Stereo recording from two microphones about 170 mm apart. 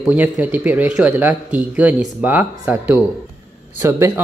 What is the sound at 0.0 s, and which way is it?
Speech, 10° right (ahead or behind).